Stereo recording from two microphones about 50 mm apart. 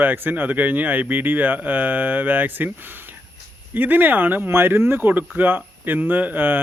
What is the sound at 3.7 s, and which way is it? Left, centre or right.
Speech, right.